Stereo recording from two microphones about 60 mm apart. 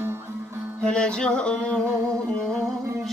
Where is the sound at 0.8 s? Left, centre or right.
Centre.